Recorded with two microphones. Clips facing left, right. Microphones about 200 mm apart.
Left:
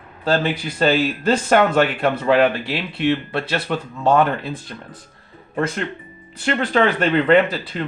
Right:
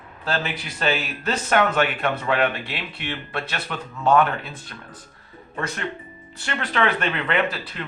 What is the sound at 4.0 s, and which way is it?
Speech, 35° left (ahead or behind).